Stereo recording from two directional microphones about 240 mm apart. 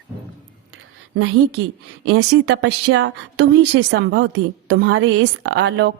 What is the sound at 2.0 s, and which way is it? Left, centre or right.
A woman's voice, right.